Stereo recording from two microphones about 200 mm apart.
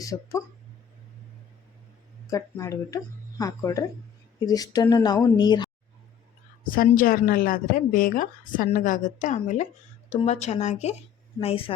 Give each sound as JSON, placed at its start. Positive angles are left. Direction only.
{"t": 0.0, "sound": "speech", "side_deg": 15}
{"t": 2.3, "sound": "speech", "side_deg": 15}
{"t": 6.7, "sound": "a woman's voice", "side_deg": 45}